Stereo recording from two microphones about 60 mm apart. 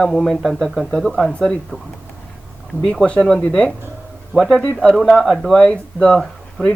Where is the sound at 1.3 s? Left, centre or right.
Centre.